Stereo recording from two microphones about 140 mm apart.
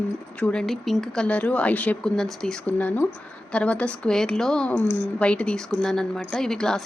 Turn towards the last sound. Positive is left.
turn(degrees=5)  # may be behind; listen again after turning